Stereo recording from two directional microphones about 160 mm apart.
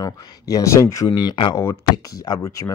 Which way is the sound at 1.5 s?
20° left (ahead or behind).